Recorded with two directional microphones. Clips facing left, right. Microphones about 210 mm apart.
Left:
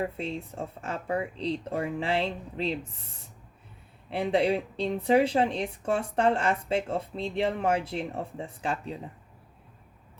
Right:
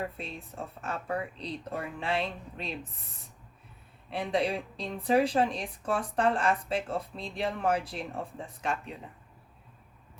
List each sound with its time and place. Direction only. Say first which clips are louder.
0.2 s speech: left 6 dB; 25° left (ahead or behind)
4.1 s speech: left 4 dB; 30° left (ahead or behind)